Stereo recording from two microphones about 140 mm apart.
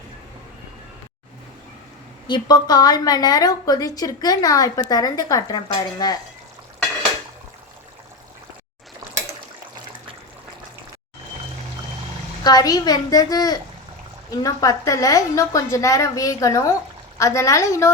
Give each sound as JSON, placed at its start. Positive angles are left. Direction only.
{"t": 2.2, "sound": "a woman's voice", "side_deg": 30}
{"t": 12.4, "sound": "a woman's voice", "side_deg": 30}